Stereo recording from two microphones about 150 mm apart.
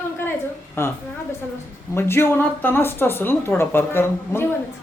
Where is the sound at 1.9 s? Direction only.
15° left (ahead or behind).